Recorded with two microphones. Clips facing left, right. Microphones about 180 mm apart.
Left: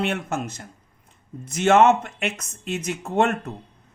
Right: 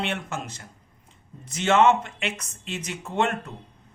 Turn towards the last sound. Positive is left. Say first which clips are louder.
# left 4 dB
turn(degrees=45)  # may be behind; listen again after turning